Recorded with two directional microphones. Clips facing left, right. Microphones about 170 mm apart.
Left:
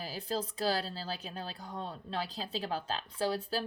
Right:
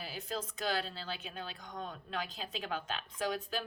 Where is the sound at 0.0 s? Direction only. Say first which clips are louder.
Left 4 dB; 35° left (ahead or behind).